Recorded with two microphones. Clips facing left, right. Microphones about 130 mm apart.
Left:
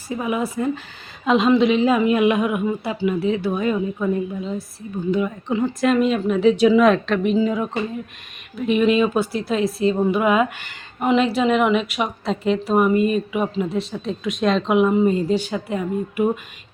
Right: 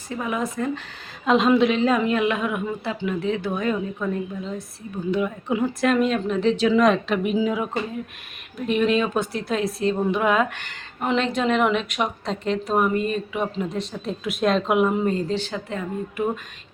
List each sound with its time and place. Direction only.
0.1 s a woman's voice: 10° left (ahead or behind)
5.1 s a woman's voice: 5° right (ahead or behind)
7.1 s a woman's voice: 5° right (ahead or behind); by 16.4 s 10° left (ahead or behind)